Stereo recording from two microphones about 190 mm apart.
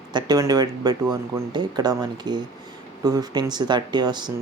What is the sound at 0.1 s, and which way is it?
Speech, 20° right (ahead or behind).